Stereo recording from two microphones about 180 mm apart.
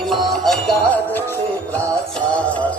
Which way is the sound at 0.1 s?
Centre (ahead or behind).